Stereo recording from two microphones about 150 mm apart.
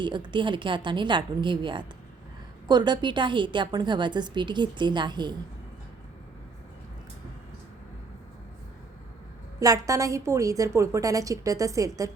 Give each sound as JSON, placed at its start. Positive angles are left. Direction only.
{"t": 0.0, "sound": "a woman's voice", "side_deg": -30}
{"t": 9.6, "sound": "a woman's voice", "side_deg": -20}